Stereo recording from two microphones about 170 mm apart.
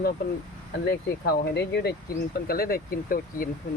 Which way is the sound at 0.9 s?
70° left (ahead or behind).